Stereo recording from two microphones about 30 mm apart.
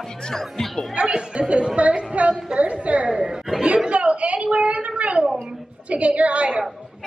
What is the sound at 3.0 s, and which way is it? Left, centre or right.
Speech, right.